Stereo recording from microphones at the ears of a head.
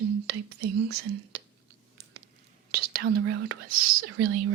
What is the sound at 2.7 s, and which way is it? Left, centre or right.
Speech, right.